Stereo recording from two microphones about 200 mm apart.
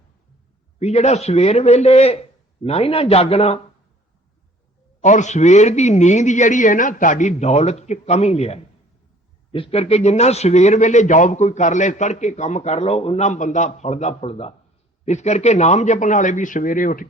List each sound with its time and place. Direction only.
0.8 s a man's voice: 35° left (ahead or behind)
5.0 s a man's voice: 35° left (ahead or behind)